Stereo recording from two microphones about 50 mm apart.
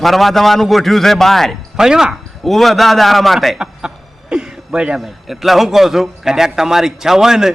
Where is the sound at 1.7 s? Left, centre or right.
Centre.